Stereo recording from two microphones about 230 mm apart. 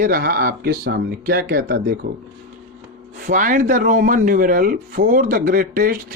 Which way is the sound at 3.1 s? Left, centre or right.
Right.